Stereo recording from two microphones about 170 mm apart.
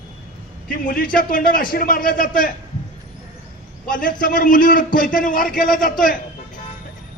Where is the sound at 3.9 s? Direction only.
55° left (ahead or behind).